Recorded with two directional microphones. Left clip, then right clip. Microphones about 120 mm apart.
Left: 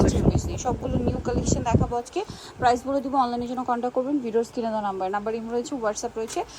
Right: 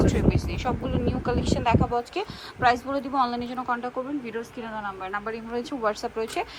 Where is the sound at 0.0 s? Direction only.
25° left (ahead or behind); by 4.4 s 40° left (ahead or behind).